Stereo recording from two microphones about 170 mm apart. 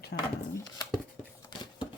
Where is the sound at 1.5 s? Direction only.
25° left (ahead or behind).